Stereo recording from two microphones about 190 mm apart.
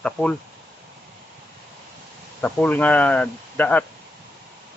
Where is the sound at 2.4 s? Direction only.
10° left (ahead or behind).